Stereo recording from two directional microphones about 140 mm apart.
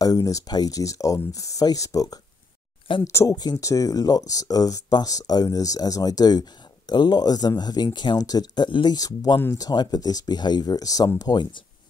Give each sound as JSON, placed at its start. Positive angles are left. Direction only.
{"t": 0.0, "sound": "speech", "side_deg": 25}